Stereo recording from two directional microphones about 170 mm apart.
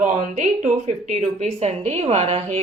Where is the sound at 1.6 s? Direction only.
40° right (ahead or behind).